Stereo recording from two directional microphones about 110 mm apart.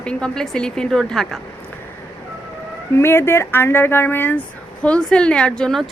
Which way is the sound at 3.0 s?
25° left (ahead or behind).